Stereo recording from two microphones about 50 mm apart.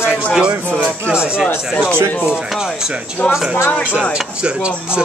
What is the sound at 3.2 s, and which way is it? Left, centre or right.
Speech, left.